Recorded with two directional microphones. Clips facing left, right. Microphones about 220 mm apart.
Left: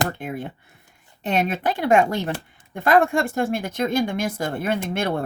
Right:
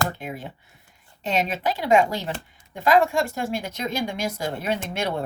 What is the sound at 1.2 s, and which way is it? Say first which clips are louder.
Speech: left 2 dB; 55° left (ahead or behind).